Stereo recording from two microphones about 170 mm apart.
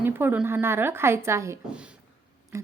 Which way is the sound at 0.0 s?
10° right (ahead or behind).